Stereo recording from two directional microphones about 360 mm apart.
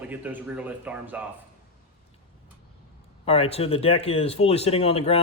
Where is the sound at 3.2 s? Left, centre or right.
Centre.